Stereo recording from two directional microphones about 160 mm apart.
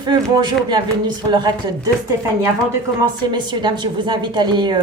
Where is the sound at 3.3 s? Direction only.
30° right (ahead or behind).